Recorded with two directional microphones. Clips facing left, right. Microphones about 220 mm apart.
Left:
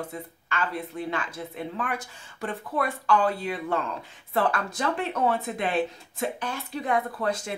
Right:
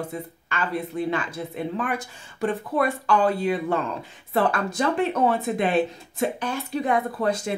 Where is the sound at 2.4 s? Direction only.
15° right (ahead or behind).